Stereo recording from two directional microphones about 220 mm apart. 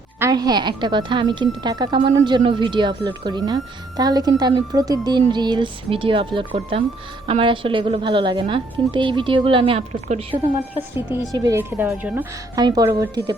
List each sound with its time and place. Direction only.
0.2 s a woman's voice: 15° right (ahead or behind)
11.1 s a woman's voice: 15° right (ahead or behind)